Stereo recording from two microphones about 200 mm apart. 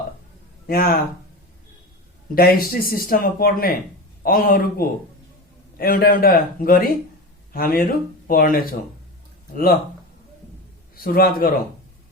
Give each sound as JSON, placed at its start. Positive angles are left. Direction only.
{"t": 0.7, "sound": "a man's voice", "side_deg": 50}
{"t": 2.3, "sound": "a man's voice", "side_deg": 45}
{"t": 10.9, "sound": "a man's voice", "side_deg": 45}